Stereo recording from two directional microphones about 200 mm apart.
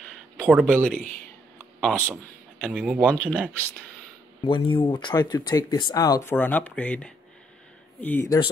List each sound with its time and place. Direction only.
0.1 s a sound: centre (ahead or behind)
1.8 s speech: 5° left (ahead or behind)
2.6 s speech: 5° right (ahead or behind)
4.5 s speech: 25° left (ahead or behind)